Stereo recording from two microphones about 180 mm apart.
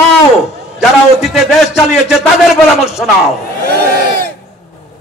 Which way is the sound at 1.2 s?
Centre (ahead or behind).